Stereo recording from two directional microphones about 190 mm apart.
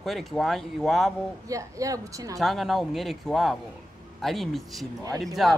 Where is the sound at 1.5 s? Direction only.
15° right (ahead or behind).